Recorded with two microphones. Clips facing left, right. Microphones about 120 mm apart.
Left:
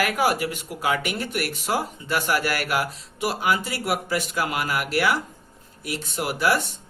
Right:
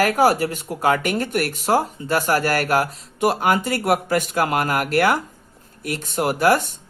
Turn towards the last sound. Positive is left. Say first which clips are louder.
# right 5 dB
turn(degrees=-45)  # may be behind; listen again after turning